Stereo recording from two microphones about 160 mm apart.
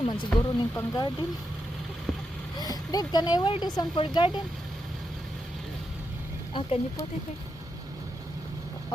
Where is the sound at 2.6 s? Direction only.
25° left (ahead or behind).